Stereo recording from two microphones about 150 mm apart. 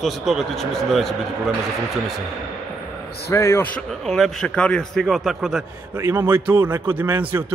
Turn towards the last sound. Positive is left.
turn(degrees=-10)  # may be behind; listen again after turning